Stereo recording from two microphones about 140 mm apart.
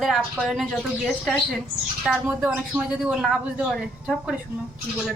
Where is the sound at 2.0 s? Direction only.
Centre (ahead or behind).